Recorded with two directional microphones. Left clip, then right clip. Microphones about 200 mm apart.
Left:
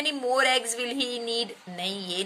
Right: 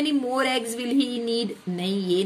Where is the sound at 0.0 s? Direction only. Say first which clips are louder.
Even; 20° left (ahead or behind).